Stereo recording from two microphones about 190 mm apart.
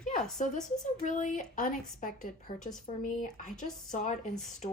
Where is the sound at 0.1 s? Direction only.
40° left (ahead or behind).